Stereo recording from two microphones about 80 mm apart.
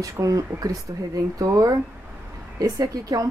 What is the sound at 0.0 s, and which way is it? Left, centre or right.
Speech, right.